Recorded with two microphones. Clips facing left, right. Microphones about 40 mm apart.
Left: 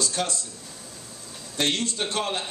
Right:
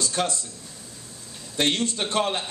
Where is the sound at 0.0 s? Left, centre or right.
Right.